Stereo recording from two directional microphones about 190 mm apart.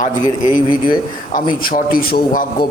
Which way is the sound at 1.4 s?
45° left (ahead or behind).